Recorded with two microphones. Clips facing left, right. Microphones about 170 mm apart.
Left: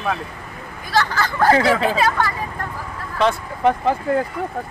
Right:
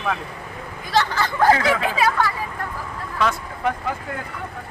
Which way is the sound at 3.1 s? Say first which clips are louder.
Left 4 dB; 30° left (ahead or behind).